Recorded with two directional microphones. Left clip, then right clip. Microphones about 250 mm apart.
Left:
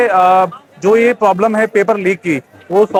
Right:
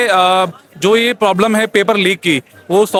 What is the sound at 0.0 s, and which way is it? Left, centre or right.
Speech, right.